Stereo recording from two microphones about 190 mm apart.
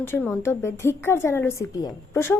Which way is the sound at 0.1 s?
10° left (ahead or behind).